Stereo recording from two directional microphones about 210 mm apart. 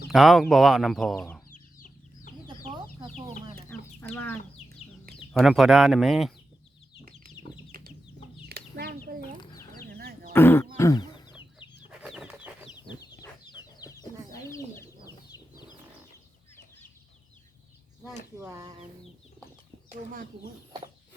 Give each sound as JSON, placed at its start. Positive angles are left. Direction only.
{"t": 0.1, "sound": "speech", "side_deg": 0}
{"t": 1.5, "sound": "chicken", "side_deg": 40}
{"t": 4.1, "sound": "speech", "side_deg": 10}
{"t": 7.1, "sound": "chicken", "side_deg": 20}
{"t": 8.4, "sound": "chicken", "side_deg": -50}
{"t": 9.4, "sound": "chicken", "side_deg": 20}
{"t": 10.0, "sound": "a sound", "side_deg": -45}
{"t": 10.3, "sound": "speech", "side_deg": 10}
{"t": 10.8, "sound": "chicken", "side_deg": 15}
{"t": 11.9, "sound": "chicken", "side_deg": -5}
{"t": 12.7, "sound": "chicken", "side_deg": 20}
{"t": 18.3, "sound": "a sound", "side_deg": -15}